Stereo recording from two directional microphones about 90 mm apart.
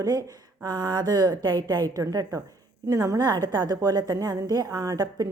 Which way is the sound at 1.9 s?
40° right (ahead or behind).